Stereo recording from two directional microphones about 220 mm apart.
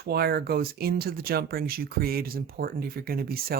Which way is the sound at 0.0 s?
45° right (ahead or behind).